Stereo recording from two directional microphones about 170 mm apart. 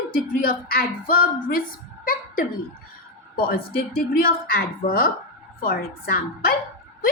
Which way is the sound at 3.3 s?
60° left (ahead or behind).